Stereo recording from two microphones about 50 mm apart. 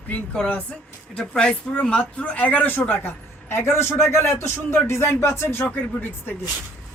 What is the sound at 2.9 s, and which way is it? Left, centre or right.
A man's voice, left.